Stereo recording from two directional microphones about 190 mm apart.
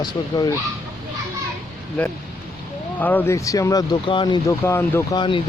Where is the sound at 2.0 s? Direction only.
5° left (ahead or behind).